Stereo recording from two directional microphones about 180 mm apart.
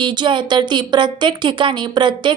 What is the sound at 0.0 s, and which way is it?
Speech, 25° right (ahead or behind).